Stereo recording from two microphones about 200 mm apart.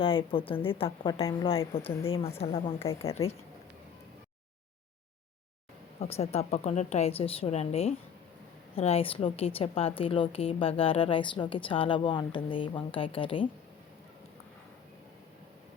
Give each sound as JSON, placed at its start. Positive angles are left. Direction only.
{"t": 0.0, "sound": "a woman's voice", "side_deg": 25}
{"t": 2.7, "sound": "a woman's voice", "side_deg": 15}
{"t": 6.0, "sound": "a woman's voice", "side_deg": 30}